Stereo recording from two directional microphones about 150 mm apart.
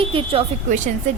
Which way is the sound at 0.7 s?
55° right (ahead or behind).